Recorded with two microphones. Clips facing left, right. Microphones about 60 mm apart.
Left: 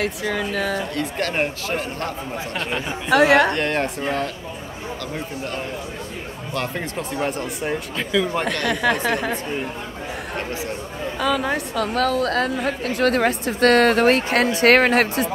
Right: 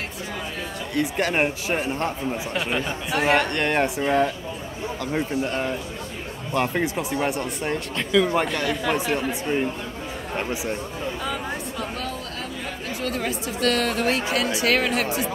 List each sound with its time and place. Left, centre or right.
0.0 s speech: left
0.9 s speech: centre
3.1 s speech: left
3.5 s speech: centre
5.1 s a man's voice: right; by 8.3 s centre
8.6 s a woman's voice: left
11.1 s a woman's voice: left